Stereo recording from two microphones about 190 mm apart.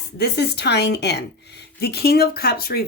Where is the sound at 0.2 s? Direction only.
60° left (ahead or behind).